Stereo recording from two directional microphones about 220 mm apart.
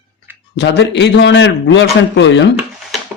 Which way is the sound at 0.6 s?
50° left (ahead or behind).